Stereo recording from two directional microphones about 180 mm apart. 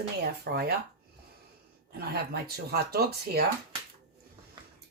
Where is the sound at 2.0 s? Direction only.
60° right (ahead or behind).